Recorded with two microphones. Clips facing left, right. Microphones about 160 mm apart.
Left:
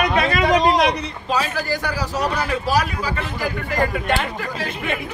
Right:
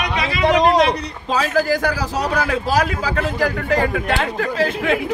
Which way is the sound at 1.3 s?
90° right.